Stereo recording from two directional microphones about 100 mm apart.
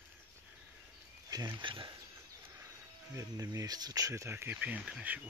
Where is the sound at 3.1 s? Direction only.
35° right (ahead or behind); by 5.2 s 10° right (ahead or behind).